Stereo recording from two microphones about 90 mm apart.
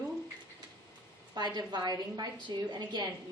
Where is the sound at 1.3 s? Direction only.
50° right (ahead or behind).